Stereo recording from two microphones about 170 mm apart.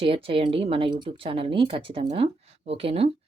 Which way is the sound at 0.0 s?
30° right (ahead or behind).